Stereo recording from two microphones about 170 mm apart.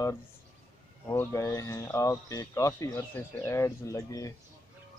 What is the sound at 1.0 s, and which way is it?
Speech, 15° left (ahead or behind).